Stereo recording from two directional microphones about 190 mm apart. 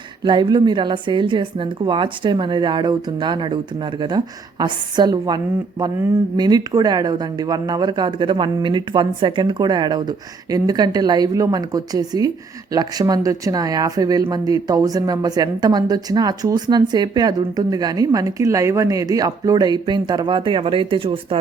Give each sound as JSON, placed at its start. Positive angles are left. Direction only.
{"t": 0.3, "sound": "speech", "side_deg": -25}
{"t": 4.6, "sound": "speech", "side_deg": -25}